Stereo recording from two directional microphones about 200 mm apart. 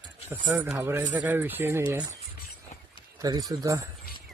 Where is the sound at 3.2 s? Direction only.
20° right (ahead or behind).